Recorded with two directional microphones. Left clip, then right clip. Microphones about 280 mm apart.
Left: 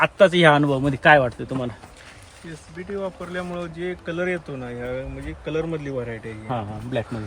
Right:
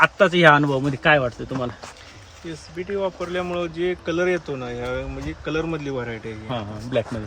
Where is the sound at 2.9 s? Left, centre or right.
Right; by 6.1 s centre.